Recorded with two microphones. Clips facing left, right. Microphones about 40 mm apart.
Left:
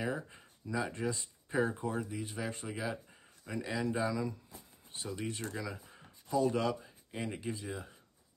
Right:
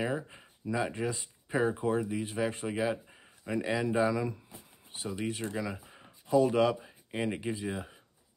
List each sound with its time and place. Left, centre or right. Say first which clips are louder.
0.0 s speech: right 4 dB; right
1.7 s speech: right 7 dB; right